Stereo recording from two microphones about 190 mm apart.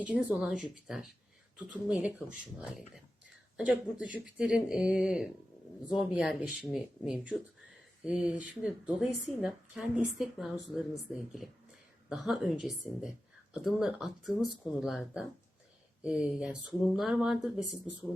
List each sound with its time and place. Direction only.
0.0 s a woman's voice: 5° right (ahead or behind)